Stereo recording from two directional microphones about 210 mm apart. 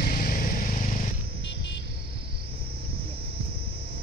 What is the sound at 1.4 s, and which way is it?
Vehicle, 55° left (ahead or behind).